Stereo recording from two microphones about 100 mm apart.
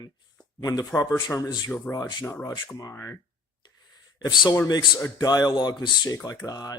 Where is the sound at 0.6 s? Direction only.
40° left (ahead or behind).